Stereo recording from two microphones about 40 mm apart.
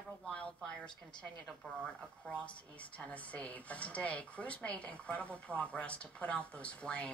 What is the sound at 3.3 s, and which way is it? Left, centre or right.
A woman's voice, left.